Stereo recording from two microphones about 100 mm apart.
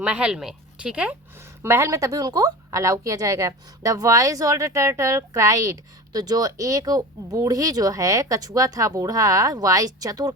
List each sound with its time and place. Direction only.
0.0 s speech: 10° right (ahead or behind)
1.6 s speech: 25° right (ahead or behind)